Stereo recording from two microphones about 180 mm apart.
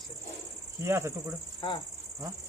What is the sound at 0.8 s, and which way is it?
Speech, 15° right (ahead or behind).